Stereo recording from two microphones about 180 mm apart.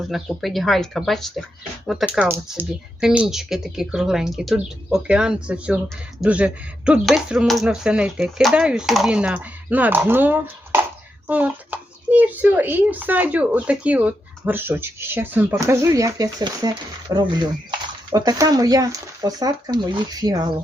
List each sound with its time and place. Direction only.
0.0 s a child's voice: centre (ahead or behind); by 20.5 s 20° right (ahead or behind)